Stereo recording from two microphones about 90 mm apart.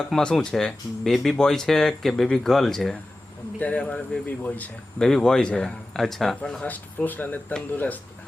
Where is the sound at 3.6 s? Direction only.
15° left (ahead or behind).